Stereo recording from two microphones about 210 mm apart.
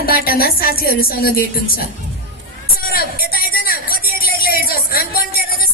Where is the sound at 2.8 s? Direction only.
45° left (ahead or behind).